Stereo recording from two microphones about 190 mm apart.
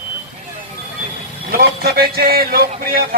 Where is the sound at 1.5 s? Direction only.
55° right (ahead or behind).